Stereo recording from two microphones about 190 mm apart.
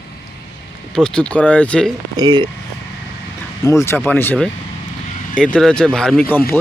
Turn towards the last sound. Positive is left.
turn(degrees=5)  # may be behind; listen again after turning